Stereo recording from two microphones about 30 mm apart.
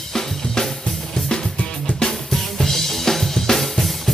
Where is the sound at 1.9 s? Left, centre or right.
Left.